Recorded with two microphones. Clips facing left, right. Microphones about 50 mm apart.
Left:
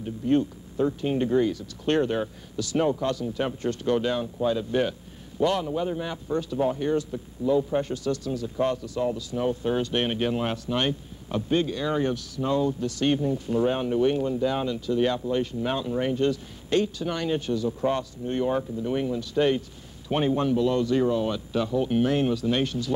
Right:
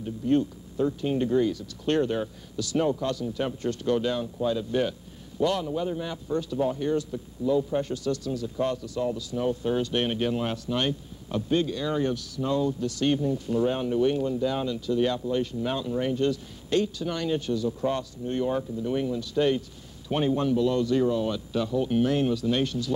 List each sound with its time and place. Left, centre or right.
0.0 s a man's voice: left